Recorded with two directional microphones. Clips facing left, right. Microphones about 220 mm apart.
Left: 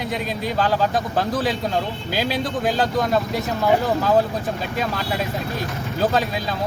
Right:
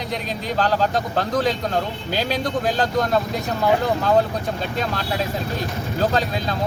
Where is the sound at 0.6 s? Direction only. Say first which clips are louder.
Even; 5° left (ahead or behind).